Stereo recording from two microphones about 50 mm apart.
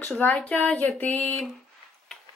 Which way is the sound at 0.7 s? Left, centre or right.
Left.